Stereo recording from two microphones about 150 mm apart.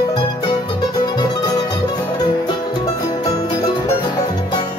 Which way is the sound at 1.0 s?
30° left (ahead or behind).